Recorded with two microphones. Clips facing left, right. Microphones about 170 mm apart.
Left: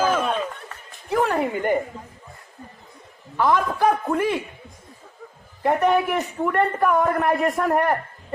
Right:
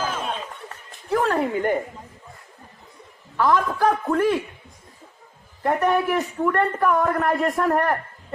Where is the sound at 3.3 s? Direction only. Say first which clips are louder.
Even; 15° left (ahead or behind).